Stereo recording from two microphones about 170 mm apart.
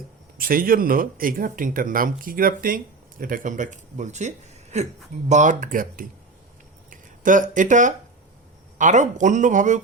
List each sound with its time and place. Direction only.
0.3 s speech: 55° right (ahead or behind)